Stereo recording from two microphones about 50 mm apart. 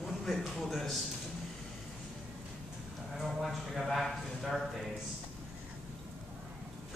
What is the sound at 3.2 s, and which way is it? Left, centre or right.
Speech, centre.